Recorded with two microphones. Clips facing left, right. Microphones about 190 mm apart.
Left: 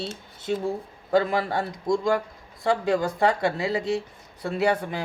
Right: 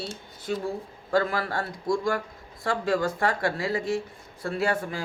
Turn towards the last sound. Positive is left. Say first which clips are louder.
# left 3 dB
turn(degrees=20)  # may be behind; listen again after turning